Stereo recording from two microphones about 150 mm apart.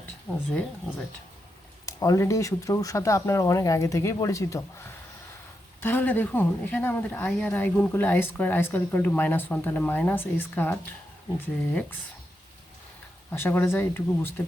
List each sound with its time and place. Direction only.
1.9 s a woman's voice: 20° left (ahead or behind)
13.3 s a woman's voice: 15° left (ahead or behind)